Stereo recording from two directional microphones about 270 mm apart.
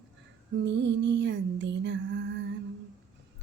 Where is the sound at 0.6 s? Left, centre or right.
Right.